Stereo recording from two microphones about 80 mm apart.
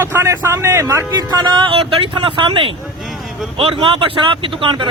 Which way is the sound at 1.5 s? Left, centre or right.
Right.